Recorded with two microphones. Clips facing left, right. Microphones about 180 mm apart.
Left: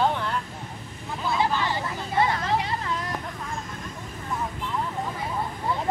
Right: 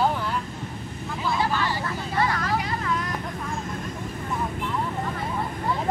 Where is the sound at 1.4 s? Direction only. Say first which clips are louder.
Left 2 dB; 20° left (ahead or behind).